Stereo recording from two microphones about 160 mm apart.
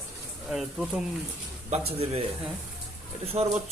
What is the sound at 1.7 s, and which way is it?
Speech, 40° right (ahead or behind).